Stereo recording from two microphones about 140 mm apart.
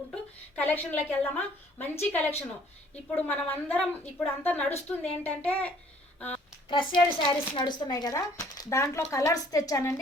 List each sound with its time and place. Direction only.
0.1 s a woman's voice: 10° left (ahead or behind)
6.7 s speech: 40° left (ahead or behind)